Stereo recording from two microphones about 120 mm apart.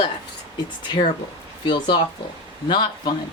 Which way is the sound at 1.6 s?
40° left (ahead or behind).